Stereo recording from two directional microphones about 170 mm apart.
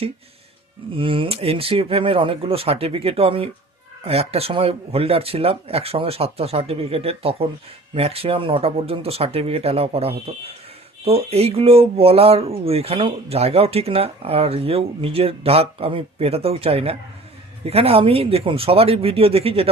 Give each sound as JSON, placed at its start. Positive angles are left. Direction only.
{"t": 0.9, "sound": "speech", "side_deg": -30}